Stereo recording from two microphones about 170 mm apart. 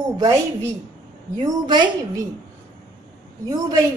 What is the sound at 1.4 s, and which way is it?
Speech, 25° right (ahead or behind).